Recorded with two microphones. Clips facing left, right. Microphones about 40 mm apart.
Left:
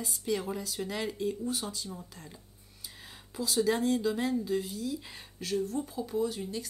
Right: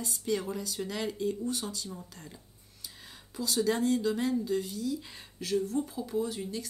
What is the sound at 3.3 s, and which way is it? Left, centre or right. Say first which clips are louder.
Speech: left 1 dB; centre.